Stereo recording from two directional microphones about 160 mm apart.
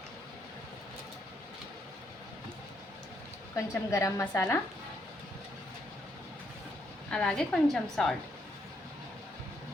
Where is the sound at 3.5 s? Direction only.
20° left (ahead or behind).